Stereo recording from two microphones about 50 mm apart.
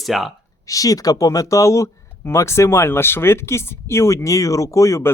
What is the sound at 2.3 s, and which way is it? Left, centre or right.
Speech, left.